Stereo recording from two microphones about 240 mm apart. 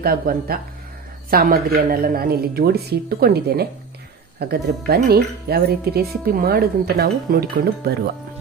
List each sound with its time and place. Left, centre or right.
0.0 s speech: right